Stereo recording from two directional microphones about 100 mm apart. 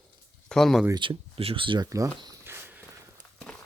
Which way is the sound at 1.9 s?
35° right (ahead or behind).